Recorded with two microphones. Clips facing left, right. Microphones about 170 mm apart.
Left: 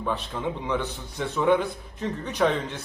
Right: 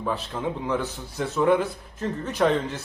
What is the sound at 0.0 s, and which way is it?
A man's voice, 5° right (ahead or behind).